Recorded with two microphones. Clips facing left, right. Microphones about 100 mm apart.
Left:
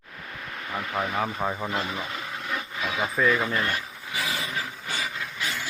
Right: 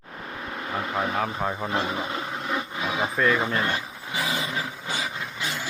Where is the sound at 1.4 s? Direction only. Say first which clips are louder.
Even; centre (ahead or behind).